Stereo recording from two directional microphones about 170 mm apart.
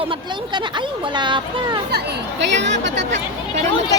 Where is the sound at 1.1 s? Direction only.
25° right (ahead or behind).